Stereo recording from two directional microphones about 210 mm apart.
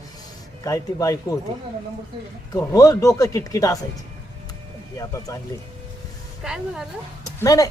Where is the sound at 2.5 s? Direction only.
15° left (ahead or behind).